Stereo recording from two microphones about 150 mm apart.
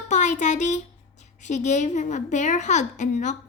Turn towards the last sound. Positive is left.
turn(degrees=55)  # may be behind; listen again after turning